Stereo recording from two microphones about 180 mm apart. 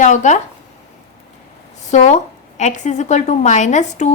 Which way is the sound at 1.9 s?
40° left (ahead or behind).